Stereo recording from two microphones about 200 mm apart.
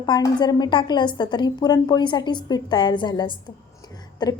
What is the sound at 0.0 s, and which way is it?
A woman's voice, 20° left (ahead or behind).